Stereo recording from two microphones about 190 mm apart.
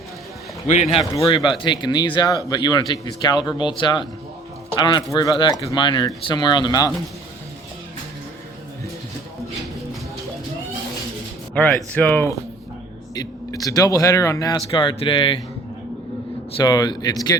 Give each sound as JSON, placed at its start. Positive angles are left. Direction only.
{"t": 0.7, "sound": "a man's voice", "side_deg": 35}
{"t": 11.5, "sound": "a man's voice", "side_deg": 10}
{"t": 16.6, "sound": "a man's voice", "side_deg": 20}